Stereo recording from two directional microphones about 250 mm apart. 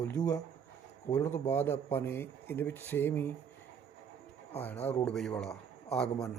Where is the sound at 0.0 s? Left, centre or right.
Centre.